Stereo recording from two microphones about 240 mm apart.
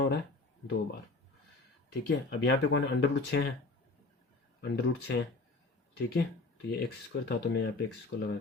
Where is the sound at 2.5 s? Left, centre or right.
Left.